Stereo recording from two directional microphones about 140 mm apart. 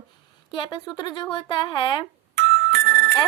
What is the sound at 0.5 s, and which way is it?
A woman's voice, 35° left (ahead or behind).